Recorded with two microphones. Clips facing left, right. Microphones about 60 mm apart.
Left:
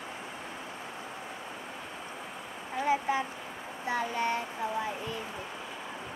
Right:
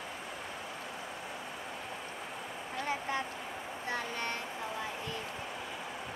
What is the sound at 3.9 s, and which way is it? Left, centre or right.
Speech, centre.